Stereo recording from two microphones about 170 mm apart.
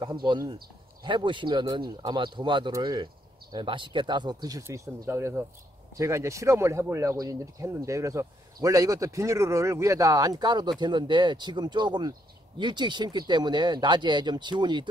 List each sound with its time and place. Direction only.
0.0 s speech: 25° right (ahead or behind)